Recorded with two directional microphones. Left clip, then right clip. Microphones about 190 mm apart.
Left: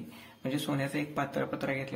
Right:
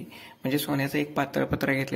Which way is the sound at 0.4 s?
25° right (ahead or behind).